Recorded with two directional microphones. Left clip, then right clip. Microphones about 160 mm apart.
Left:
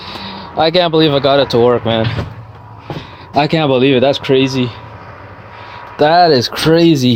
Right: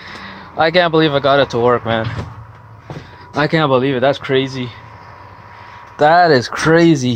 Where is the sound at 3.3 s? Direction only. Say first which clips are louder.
Left 2 dB; 35° left (ahead or behind).